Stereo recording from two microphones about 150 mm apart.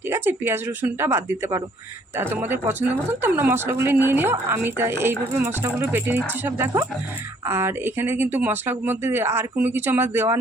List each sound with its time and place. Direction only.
0.1 s speech: 15° right (ahead or behind)